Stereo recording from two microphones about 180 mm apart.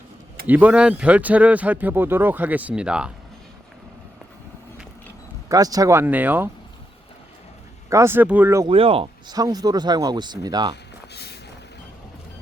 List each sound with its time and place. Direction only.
0.4 s speech: 10° right (ahead or behind)
5.5 s speech: 20° right (ahead or behind)
7.9 s speech: 15° right (ahead or behind)
8.6 s speech: 30° right (ahead or behind)
11.1 s vehicle: 65° left (ahead or behind)